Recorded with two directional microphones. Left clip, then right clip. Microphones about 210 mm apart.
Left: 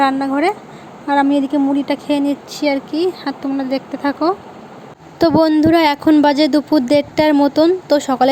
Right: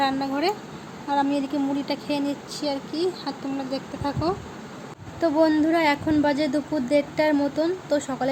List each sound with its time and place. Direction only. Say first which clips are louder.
0.0 s speech: left 9 dB; 25° left (ahead or behind)
5.2 s speech: left 8 dB; 40° left (ahead or behind)